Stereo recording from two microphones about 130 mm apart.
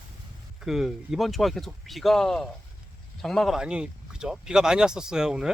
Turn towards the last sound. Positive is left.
turn(degrees=-5)  # may be behind; listen again after turning